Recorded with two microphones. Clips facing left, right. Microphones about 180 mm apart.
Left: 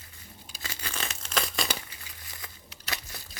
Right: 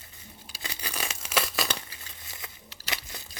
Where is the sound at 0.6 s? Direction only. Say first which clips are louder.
Right 1 dB; 15° right (ahead or behind).